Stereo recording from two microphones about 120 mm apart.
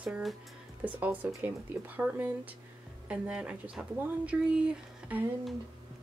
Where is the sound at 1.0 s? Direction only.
15° right (ahead or behind).